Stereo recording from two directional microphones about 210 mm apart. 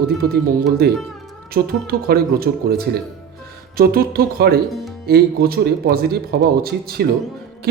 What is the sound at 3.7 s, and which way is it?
Speech, 45° right (ahead or behind).